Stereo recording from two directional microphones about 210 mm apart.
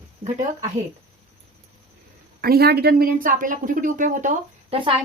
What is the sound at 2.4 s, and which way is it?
Speech, 45° right (ahead or behind).